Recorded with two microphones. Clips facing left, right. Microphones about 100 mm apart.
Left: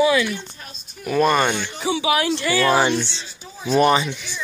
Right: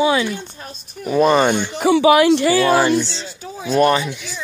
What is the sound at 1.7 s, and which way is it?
Speech, 55° right (ahead or behind).